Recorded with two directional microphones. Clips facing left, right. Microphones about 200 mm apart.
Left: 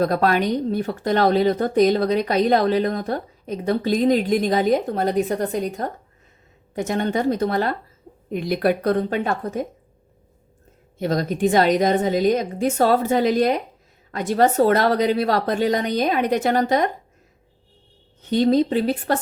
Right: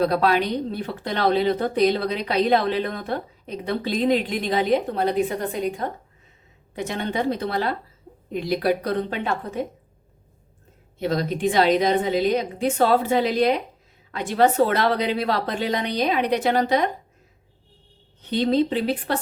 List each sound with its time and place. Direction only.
0.0 s speech: 45° left (ahead or behind)
11.0 s speech: 45° left (ahead or behind)
18.2 s speech: 45° left (ahead or behind)